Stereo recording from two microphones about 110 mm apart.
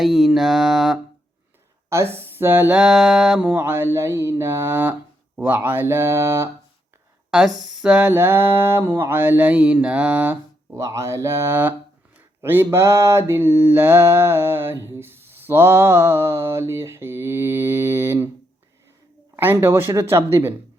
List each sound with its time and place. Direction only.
0.0 s a sound: centre (ahead or behind)
1.9 s speech: 25° right (ahead or behind)
2.7 s mantra: 5° right (ahead or behind)
3.5 s mantra: 20° right (ahead or behind)
7.3 s speech: 5° right (ahead or behind)
7.6 s a sound: 5° right (ahead or behind)
10.8 s mantra: 25° right (ahead or behind)
19.4 s mantra: 20° right (ahead or behind)